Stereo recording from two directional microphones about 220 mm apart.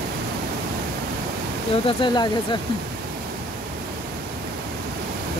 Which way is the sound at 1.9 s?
25° left (ahead or behind).